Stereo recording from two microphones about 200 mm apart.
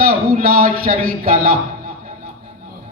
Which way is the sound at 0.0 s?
45° right (ahead or behind).